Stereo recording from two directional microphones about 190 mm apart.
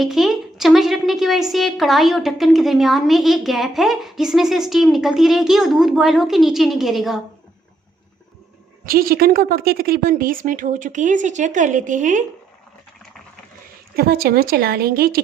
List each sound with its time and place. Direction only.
0.0 s a woman's voice: centre (ahead or behind)
8.9 s a woman's voice: 50° right (ahead or behind)
13.9 s a woman's voice: 55° right (ahead or behind)